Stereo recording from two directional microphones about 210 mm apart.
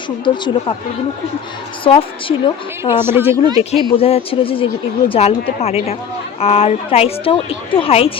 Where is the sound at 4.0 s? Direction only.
25° left (ahead or behind).